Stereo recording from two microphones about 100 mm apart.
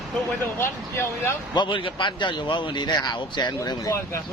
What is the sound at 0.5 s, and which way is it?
Speech, 25° left (ahead or behind).